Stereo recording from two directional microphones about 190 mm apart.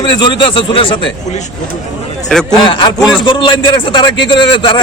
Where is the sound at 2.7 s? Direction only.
25° left (ahead or behind).